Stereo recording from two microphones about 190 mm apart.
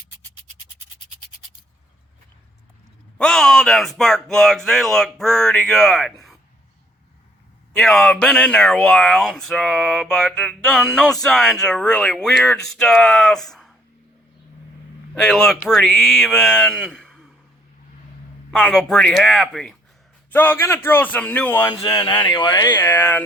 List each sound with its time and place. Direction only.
3.2 s speech: 5° left (ahead or behind)
7.7 s speech: 5° left (ahead or behind)
15.1 s speech: centre (ahead or behind)
18.5 s a man's voice: 5° left (ahead or behind)